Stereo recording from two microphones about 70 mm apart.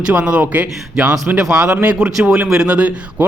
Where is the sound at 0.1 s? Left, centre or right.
Centre.